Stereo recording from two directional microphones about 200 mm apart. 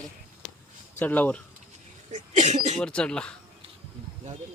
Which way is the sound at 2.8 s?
5° left (ahead or behind).